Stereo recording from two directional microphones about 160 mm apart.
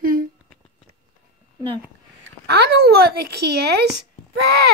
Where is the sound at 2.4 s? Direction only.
90° right.